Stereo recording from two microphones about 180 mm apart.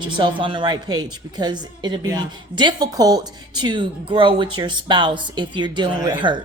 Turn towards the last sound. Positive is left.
turn(degrees=-25)  # may be behind; listen again after turning